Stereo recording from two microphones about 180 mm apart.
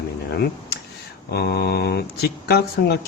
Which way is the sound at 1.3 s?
65° left (ahead or behind).